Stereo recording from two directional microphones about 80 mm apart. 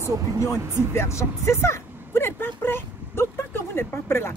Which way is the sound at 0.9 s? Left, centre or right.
Left.